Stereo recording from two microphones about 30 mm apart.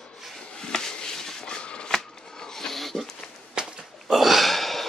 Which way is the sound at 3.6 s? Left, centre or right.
Right.